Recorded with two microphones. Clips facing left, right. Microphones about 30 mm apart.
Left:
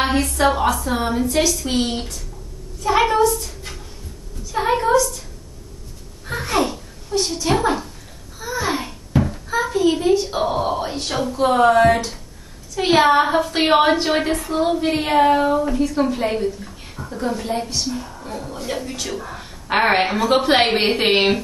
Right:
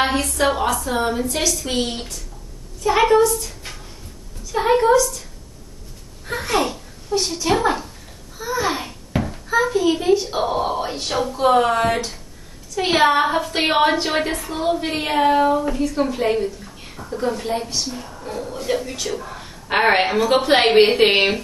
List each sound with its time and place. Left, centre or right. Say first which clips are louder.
0.1 s a woman's voice: left 2 dB; centre
4.5 s a woman's voice: right 2 dB; centre
6.2 s a child's voice: even; centre
9.2 s a sound: right 4 dB; centre
10.1 s a woman's voice: even; centre